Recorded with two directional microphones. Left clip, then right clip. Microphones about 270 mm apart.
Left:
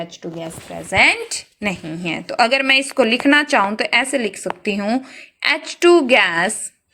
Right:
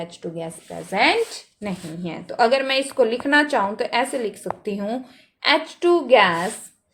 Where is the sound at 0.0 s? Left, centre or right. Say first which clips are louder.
Left 2 dB; left.